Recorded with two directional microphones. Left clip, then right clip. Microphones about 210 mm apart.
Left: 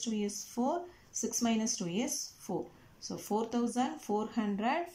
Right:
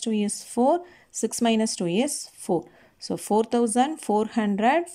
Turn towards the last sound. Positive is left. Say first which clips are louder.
# right 11 dB
turn(degrees=-45)  # may be behind; listen again after turning